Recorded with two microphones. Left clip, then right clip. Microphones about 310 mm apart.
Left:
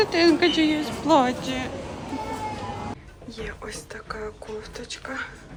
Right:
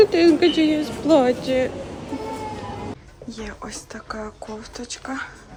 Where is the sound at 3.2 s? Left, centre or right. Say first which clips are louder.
Right 1 dB; centre.